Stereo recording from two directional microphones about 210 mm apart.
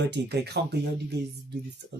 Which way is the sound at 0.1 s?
50° right (ahead or behind).